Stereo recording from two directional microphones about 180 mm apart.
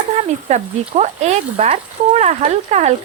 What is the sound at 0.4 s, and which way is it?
Speech, 40° right (ahead or behind).